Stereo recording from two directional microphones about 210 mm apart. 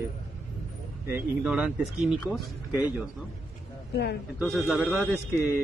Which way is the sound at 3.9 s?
50° left (ahead or behind).